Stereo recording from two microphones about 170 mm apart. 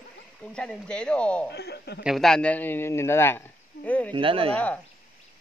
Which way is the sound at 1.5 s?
75° left (ahead or behind).